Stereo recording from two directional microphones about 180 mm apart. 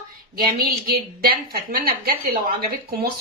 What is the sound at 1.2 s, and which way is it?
A woman's voice, 55° right (ahead or behind).